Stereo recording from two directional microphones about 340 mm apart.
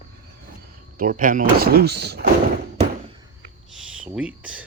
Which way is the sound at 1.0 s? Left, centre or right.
Right.